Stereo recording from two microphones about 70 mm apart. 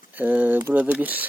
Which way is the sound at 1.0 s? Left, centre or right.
Right.